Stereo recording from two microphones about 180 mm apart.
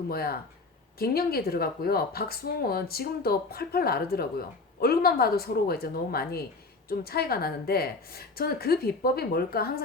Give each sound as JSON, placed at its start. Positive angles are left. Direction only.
{"t": 0.1, "sound": "speech", "side_deg": 55}